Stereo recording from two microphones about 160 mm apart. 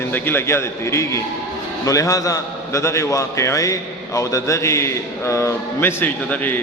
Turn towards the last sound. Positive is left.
turn(degrees=10)  # may be behind; listen again after turning